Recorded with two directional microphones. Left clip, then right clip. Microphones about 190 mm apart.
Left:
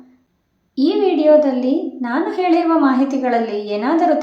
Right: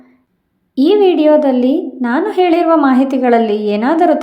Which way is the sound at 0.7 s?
35° right (ahead or behind).